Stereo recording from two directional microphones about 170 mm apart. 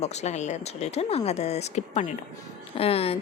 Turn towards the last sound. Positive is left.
turn(degrees=35)  # may be behind; listen again after turning